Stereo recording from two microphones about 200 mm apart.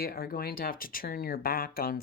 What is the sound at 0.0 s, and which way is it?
Speech, 50° left (ahead or behind).